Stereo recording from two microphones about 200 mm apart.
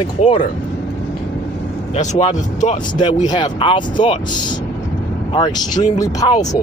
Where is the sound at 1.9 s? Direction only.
35° left (ahead or behind).